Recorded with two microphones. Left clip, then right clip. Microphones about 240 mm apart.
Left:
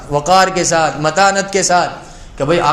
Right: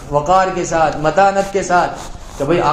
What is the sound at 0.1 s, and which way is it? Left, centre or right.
A man's voice, left.